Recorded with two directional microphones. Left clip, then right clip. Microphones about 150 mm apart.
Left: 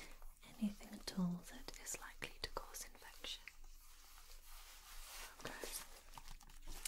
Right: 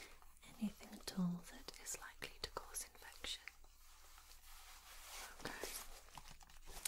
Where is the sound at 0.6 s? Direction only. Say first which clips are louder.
Left 2 dB; 20° left (ahead or behind).